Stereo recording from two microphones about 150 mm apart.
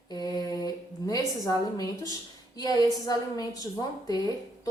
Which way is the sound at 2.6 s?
25° left (ahead or behind).